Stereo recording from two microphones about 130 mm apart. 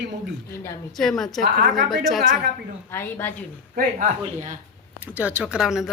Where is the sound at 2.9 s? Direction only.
15° left (ahead or behind).